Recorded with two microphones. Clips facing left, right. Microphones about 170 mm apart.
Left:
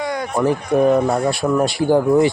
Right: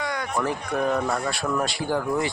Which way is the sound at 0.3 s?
30° left (ahead or behind).